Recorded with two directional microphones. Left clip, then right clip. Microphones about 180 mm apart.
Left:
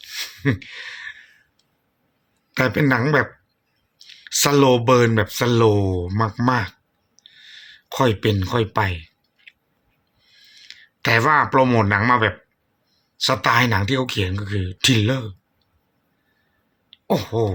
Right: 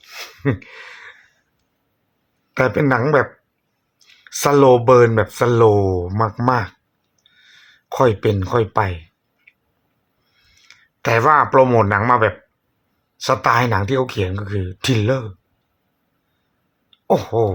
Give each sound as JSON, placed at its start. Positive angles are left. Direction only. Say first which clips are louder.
{"t": 0.1, "sound": "gasp", "louder": "right 1 dB", "side_deg": 0}
{"t": 2.6, "sound": "speech", "louder": "right 3 dB", "side_deg": 5}
{"t": 4.3, "sound": "speech", "louder": "right 4 dB", "side_deg": 5}
{"t": 6.1, "sound": "speech", "louder": "right 3 dB", "side_deg": 20}
{"t": 6.3, "sound": "speech", "louder": "right 1 dB", "side_deg": 5}
{"t": 7.9, "sound": "speech", "louder": "right 4 dB", "side_deg": 5}
{"t": 10.5, "sound": "a sound", "louder": "left 5 dB", "side_deg": 5}
{"t": 11.3, "sound": "speech", "louder": "right 4 dB", "side_deg": 10}
{"t": 17.1, "sound": "speech", "louder": "right 5 dB", "side_deg": 0}